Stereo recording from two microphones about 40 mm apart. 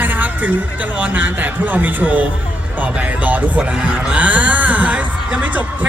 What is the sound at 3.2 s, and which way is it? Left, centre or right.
Speech, right.